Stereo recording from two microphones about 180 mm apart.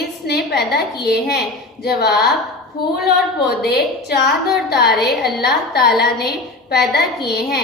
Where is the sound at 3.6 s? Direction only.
60° left (ahead or behind).